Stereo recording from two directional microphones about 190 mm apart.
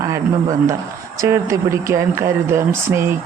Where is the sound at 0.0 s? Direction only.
15° right (ahead or behind).